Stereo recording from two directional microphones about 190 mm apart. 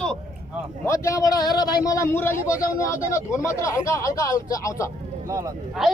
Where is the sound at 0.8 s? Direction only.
15° left (ahead or behind).